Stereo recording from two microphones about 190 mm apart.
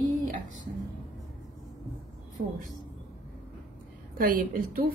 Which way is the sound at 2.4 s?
45° right (ahead or behind).